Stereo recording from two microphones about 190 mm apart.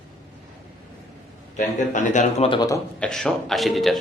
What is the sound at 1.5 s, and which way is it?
Speech, 40° left (ahead or behind).